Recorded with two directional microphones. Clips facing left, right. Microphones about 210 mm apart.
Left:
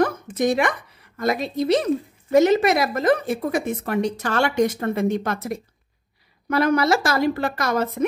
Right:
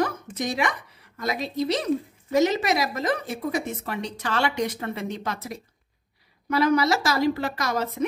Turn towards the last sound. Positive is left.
turn(degrees=55)  # may be behind; listen again after turning